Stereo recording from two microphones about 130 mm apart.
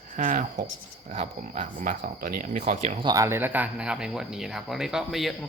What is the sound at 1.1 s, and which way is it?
Speech, 65° right (ahead or behind).